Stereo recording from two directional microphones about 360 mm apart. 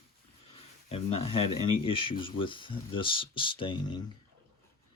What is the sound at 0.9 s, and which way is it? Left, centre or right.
Speech, centre.